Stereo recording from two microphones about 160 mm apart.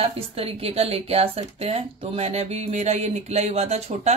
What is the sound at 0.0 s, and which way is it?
A woman's voice, 35° right (ahead or behind).